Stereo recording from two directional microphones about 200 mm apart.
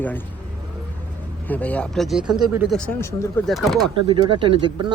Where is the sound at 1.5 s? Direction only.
10° left (ahead or behind).